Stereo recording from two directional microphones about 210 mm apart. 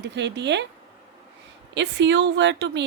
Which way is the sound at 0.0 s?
55° right (ahead or behind).